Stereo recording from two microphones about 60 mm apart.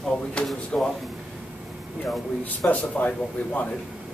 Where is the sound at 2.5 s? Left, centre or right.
Left.